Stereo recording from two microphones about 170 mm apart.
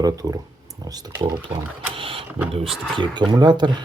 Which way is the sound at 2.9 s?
25° right (ahead or behind).